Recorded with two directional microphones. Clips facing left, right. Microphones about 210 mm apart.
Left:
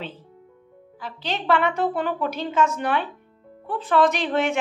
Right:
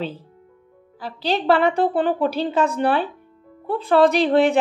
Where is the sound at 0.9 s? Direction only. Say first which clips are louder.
Right 7 dB; 35° right (ahead or behind).